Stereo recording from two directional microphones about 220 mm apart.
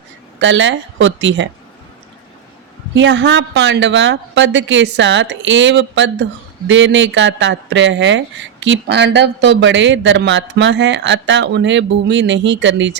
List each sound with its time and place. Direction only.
0.3 s speech: 55° right (ahead or behind)
2.9 s speech: 55° right (ahead or behind)